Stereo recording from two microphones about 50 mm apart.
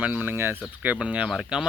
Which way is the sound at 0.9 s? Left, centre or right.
Right.